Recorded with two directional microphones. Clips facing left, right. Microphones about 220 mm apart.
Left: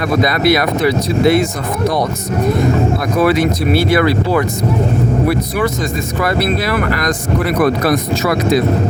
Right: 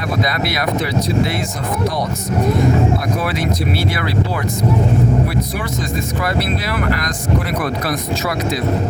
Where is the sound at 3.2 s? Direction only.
70° left (ahead or behind).